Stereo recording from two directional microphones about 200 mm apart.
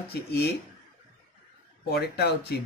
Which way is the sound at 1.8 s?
50° left (ahead or behind).